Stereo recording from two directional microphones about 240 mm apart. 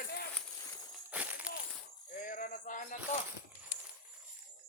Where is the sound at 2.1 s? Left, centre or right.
Left.